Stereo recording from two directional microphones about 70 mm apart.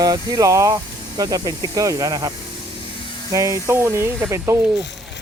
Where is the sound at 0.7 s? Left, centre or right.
Right.